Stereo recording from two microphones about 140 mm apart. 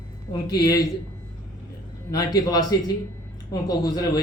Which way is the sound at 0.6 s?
25° left (ahead or behind).